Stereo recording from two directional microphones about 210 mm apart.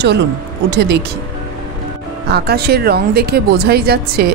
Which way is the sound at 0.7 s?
50° right (ahead or behind).